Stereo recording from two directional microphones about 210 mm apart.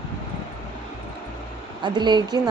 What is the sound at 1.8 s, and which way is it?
Speech, 20° right (ahead or behind).